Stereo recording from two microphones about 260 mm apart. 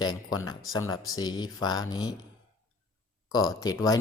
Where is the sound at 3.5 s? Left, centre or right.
Centre.